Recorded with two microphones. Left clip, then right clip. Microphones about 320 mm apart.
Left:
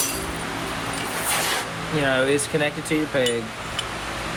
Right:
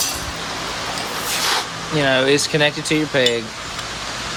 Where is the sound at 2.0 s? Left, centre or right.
Right.